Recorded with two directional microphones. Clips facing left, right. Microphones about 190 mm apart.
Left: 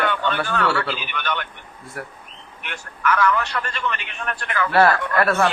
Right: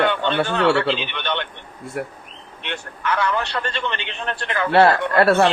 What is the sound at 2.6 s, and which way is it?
A man's voice, 25° right (ahead or behind).